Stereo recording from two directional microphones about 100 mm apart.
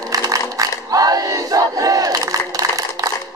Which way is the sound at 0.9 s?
35° right (ahead or behind).